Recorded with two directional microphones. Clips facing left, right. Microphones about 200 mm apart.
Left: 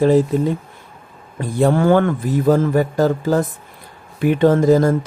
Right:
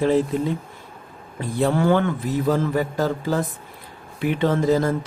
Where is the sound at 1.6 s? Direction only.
50° left (ahead or behind).